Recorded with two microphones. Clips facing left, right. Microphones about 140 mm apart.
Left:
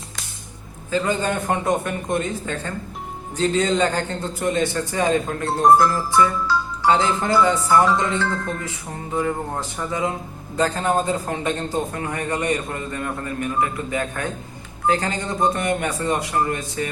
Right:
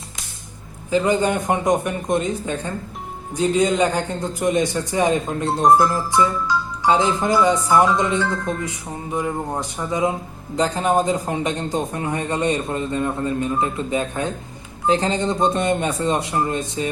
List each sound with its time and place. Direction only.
0.9 s a man's voice: 15° right (ahead or behind)